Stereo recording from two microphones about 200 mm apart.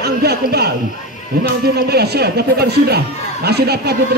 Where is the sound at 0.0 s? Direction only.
55° right (ahead or behind).